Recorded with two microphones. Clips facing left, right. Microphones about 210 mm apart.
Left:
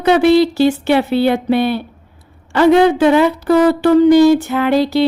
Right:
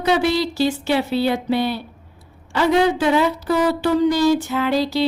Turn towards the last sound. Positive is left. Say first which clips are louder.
# left 6 dB
turn(degrees=60)  # may be behind; listen again after turning